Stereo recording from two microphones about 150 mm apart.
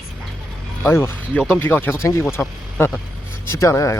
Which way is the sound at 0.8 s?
15° left (ahead or behind).